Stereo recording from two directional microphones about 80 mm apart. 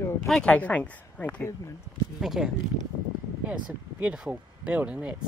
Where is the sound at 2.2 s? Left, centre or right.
Centre.